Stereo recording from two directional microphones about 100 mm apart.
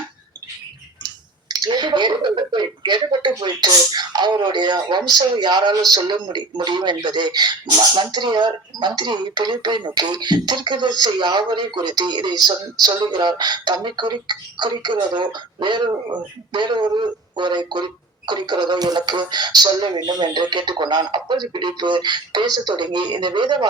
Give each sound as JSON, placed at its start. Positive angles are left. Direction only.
{"t": 1.0, "sound": "speech", "side_deg": -45}